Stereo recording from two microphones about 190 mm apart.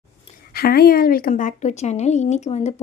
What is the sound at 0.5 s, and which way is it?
A woman's voice, 50° left (ahead or behind).